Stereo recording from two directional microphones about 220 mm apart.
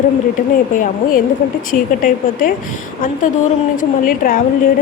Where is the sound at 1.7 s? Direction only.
40° left (ahead or behind).